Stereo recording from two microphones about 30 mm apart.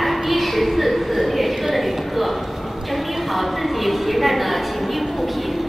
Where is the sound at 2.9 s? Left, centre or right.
Centre.